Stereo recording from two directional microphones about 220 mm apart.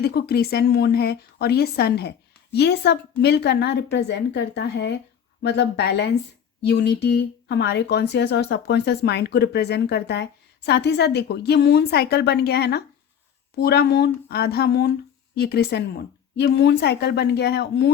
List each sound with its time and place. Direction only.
0.0 s a woman's voice: 45° left (ahead or behind)